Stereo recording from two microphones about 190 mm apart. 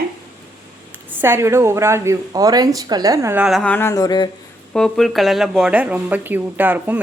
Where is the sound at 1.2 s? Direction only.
15° right (ahead or behind); by 4.3 s 20° left (ahead or behind).